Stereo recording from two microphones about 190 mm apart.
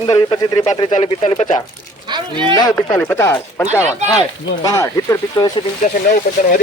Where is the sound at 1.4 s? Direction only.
40° left (ahead or behind).